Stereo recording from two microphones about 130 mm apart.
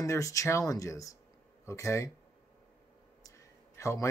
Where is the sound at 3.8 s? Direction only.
25° left (ahead or behind).